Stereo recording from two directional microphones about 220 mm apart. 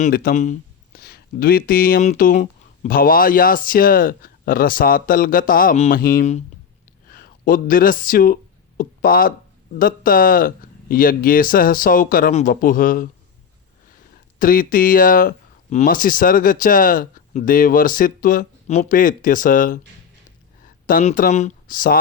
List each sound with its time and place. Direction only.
0.0 s speech: 40° left (ahead or behind)
14.3 s speech: 40° left (ahead or behind)
20.8 s speech: 35° left (ahead or behind)